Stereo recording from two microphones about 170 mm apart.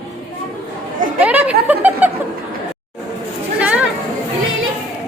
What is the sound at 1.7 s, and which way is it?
Chuckle, 10° right (ahead or behind).